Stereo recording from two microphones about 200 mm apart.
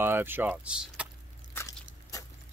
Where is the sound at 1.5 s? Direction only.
15° left (ahead or behind).